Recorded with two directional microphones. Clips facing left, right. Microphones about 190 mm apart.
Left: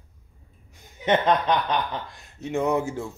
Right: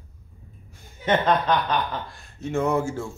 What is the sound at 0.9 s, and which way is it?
Speech, 20° left (ahead or behind).